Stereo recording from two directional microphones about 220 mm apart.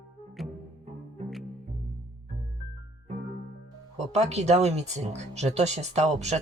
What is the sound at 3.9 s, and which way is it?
Speech, 30° right (ahead or behind).